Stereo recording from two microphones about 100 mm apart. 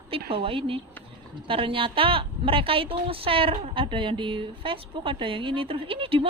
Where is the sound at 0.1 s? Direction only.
65° right (ahead or behind).